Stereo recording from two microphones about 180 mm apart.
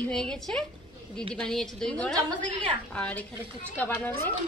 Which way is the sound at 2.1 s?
25° right (ahead or behind).